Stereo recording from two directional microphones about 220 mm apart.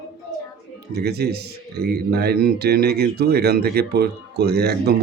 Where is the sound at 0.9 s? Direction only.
45° right (ahead or behind).